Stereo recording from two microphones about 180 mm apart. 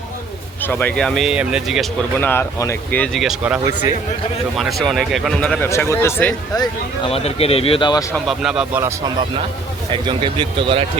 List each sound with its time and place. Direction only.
0.6 s speech: 10° left (ahead or behind)
2.1 s speech: 10° left (ahead or behind)
5.6 s speech: 15° left (ahead or behind)
6.6 s speech: 30° left (ahead or behind)
8.1 s speech: centre (ahead or behind)
9.9 s speech: 30° right (ahead or behind)